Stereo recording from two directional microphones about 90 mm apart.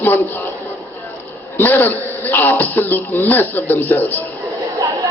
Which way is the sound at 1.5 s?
25° left (ahead or behind).